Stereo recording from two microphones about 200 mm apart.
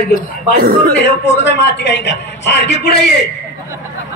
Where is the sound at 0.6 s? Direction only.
50° right (ahead or behind).